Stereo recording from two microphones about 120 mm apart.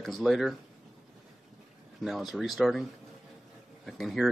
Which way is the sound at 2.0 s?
Centre (ahead or behind).